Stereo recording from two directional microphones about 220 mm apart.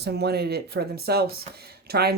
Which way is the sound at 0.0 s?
50° right (ahead or behind).